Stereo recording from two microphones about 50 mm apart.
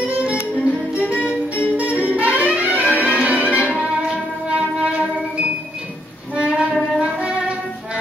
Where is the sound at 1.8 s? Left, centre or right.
Right.